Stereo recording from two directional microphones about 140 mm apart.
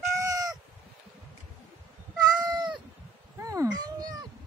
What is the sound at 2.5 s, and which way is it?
Cat, 30° right (ahead or behind).